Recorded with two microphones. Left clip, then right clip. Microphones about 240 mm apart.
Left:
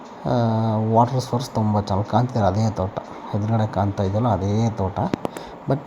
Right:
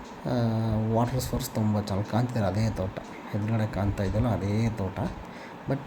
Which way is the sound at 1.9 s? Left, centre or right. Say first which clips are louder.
Left 9 dB; centre.